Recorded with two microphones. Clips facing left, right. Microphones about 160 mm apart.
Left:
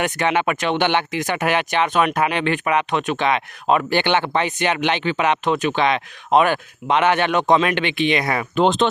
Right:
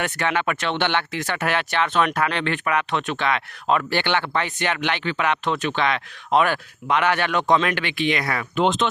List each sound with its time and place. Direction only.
0.0 s speech: 20° left (ahead or behind)
8.5 s speech: 35° left (ahead or behind)